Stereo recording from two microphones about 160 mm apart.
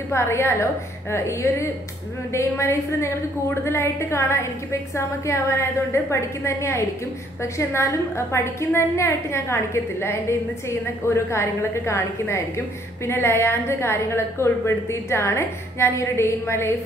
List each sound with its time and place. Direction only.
0.1 s a woman's voice: 15° left (ahead or behind)